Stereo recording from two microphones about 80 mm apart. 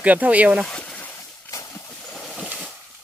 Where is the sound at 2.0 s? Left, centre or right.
Centre.